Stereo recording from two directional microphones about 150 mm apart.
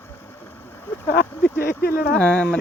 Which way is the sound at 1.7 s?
90° left.